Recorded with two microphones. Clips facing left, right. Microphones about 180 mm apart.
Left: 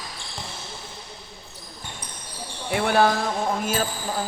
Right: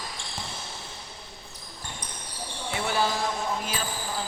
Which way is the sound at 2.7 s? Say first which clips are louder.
Left 8 dB; 60° left (ahead or behind).